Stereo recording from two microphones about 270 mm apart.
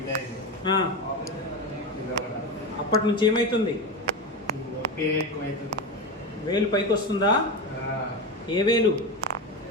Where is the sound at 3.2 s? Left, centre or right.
Centre.